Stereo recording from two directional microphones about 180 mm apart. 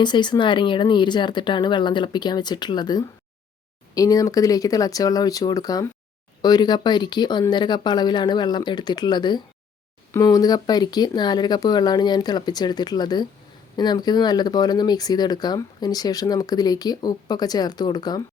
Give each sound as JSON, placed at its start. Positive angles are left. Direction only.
{"t": 0.0, "sound": "speech", "side_deg": 25}